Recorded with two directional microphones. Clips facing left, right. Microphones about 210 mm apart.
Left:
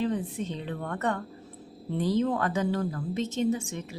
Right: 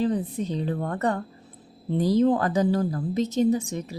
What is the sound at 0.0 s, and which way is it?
Speech, 35° right (ahead or behind).